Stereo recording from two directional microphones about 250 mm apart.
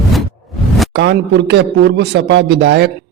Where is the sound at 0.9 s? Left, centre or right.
Right.